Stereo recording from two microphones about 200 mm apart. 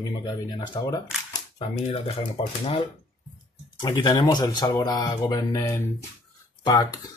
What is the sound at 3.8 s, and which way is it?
Speech, 20° left (ahead or behind).